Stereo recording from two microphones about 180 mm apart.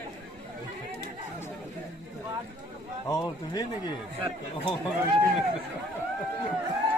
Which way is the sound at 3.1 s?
20° left (ahead or behind).